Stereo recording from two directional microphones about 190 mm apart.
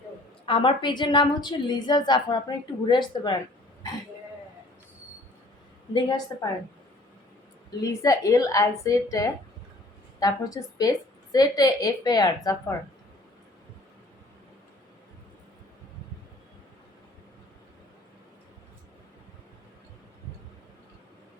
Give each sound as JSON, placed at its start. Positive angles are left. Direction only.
{"t": 0.4, "sound": "a woman's voice", "side_deg": 25}
{"t": 5.9, "sound": "a woman's voice", "side_deg": 25}
{"t": 7.8, "sound": "a woman's voice", "side_deg": 15}